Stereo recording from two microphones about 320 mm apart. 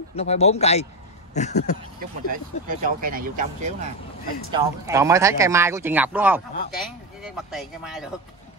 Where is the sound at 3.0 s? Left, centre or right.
Right.